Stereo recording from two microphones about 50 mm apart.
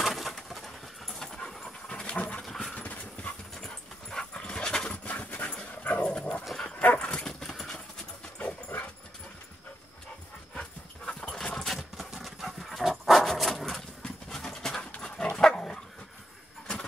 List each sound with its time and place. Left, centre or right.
0.0 s bird: centre
0.5 s dog: centre; by 2.4 s left
2.4 s dog: centre
2.7 s clip-clop: left
3.6 s dog: centre
4.8 s pant: left
5.9 s dog: left
6.8 s dog: left
7.1 s dog: centre
10.5 s dog: centre
11.3 s clip-clop: centre
11.7 s dog: centre
14.0 s pant: centre
15.0 s dog: centre